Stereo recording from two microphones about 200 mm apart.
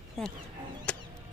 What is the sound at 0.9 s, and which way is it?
Music, 5° left (ahead or behind).